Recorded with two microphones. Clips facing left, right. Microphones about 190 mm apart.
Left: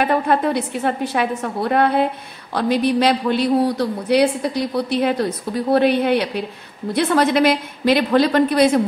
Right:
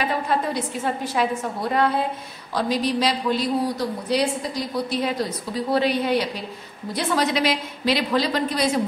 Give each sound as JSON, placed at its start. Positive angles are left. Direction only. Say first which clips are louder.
{"t": 0.0, "sound": "a woman's voice", "louder": "left 6 dB", "side_deg": 55}